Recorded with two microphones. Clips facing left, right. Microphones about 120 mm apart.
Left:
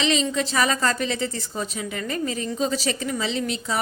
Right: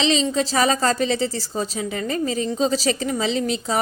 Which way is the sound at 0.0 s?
30° right (ahead or behind).